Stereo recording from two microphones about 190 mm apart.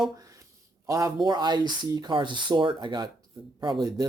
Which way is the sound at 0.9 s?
20° right (ahead or behind).